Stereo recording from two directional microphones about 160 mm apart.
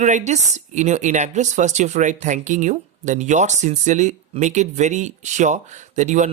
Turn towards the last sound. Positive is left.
turn(degrees=-50)  # may be behind; listen again after turning